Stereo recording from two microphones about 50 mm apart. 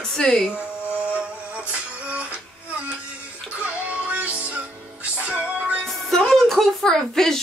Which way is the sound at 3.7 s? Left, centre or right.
Right.